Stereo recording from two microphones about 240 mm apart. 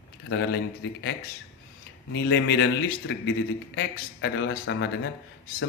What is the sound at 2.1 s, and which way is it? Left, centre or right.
Speech, left.